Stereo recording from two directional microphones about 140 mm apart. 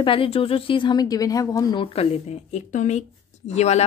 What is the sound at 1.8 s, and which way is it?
Speech, 45° left (ahead or behind).